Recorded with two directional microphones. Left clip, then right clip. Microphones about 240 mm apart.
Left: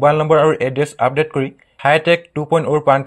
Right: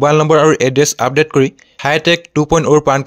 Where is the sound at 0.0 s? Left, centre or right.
Right.